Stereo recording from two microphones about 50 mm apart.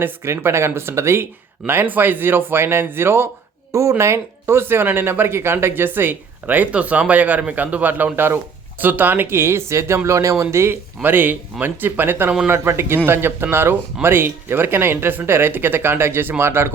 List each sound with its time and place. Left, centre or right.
0.3 s speech: right
3.7 s speech: right
10.1 s speech: right